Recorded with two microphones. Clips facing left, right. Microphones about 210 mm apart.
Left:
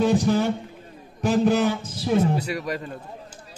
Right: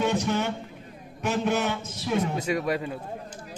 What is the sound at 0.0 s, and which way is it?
A man's voice, 35° left (ahead or behind).